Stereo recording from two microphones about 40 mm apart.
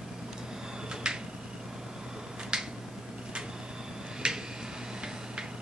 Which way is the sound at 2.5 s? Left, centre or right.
Right.